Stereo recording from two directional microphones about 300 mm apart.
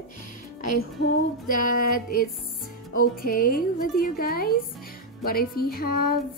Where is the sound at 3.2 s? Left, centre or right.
Left.